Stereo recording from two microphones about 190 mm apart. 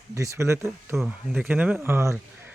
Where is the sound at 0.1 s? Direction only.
15° right (ahead or behind).